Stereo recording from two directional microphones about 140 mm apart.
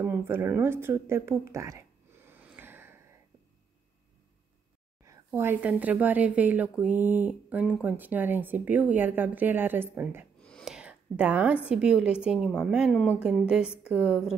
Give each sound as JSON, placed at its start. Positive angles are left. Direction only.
{"t": 0.0, "sound": "speech", "side_deg": -15}
{"t": 5.0, "sound": "a woman's voice", "side_deg": -20}
{"t": 10.4, "sound": "a woman's voice", "side_deg": 0}